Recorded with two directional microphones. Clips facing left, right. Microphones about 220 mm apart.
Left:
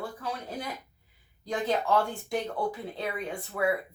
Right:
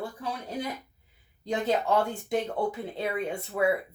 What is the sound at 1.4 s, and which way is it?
Speech, 25° right (ahead or behind).